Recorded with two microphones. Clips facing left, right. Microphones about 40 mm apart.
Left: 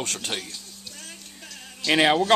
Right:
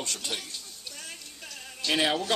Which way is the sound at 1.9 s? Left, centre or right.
Left.